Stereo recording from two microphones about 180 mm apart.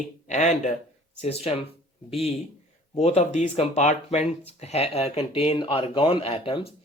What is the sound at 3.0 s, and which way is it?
Speech, 35° left (ahead or behind).